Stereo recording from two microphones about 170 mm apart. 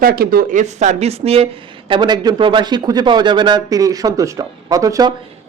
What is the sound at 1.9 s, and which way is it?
Speech, 25° right (ahead or behind).